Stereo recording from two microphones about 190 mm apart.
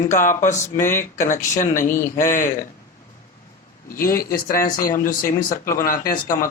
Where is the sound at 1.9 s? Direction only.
15° left (ahead or behind).